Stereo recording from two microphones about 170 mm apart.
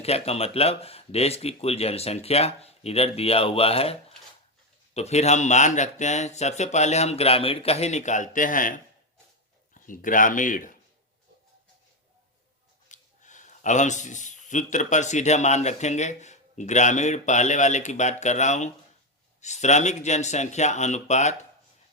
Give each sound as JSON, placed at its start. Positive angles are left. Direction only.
{"t": 0.0, "sound": "speech", "side_deg": 35}
{"t": 4.9, "sound": "speech", "side_deg": 40}
{"t": 12.9, "sound": "speech", "side_deg": 45}